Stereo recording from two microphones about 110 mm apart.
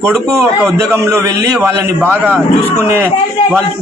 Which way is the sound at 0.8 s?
30° right (ahead or behind).